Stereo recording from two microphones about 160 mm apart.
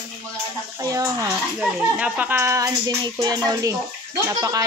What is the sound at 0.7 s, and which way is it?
Speech, 20° right (ahead or behind).